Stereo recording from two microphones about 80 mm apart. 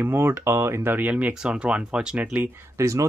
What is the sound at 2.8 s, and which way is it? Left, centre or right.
Speech, right.